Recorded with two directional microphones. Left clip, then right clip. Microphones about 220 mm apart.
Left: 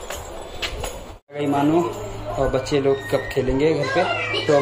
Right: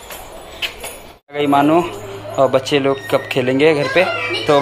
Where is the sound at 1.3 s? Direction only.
5° right (ahead or behind).